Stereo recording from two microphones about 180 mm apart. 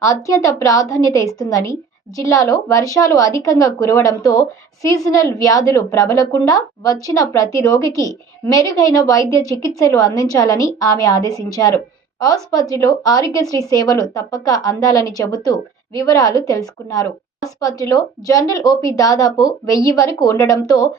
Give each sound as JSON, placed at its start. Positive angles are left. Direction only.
{"t": 0.0, "sound": "a woman's voice", "side_deg": 20}